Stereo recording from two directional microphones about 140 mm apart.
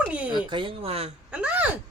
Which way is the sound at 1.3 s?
10° right (ahead or behind).